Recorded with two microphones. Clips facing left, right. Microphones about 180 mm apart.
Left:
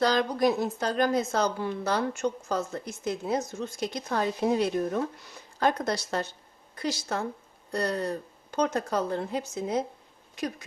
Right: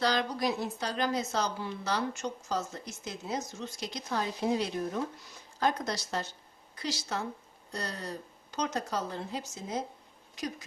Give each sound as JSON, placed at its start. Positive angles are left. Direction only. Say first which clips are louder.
{"t": 0.0, "sound": "a woman's voice", "louder": "left 6 dB", "side_deg": 45}